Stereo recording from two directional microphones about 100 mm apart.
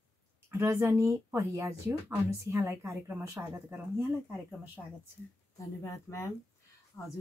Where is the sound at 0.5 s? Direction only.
25° right (ahead or behind).